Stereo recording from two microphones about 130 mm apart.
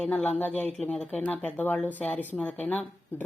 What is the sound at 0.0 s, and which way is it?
Speech, 10° left (ahead or behind).